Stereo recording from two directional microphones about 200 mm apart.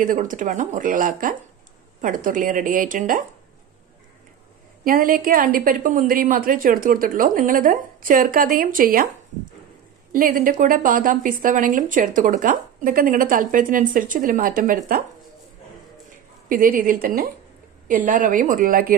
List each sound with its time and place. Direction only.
0.0 s speech: 40° right (ahead or behind)
4.8 s a woman's voice: 45° right (ahead or behind)
10.1 s a woman's voice: 45° right (ahead or behind)
16.4 s a woman's voice: 45° right (ahead or behind)